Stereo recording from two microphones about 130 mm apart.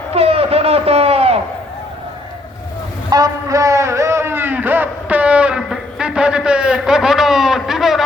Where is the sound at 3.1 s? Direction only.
30° right (ahead or behind); by 8.0 s centre (ahead or behind).